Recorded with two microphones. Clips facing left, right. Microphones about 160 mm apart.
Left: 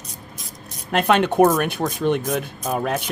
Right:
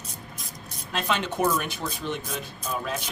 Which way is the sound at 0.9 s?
60° left (ahead or behind).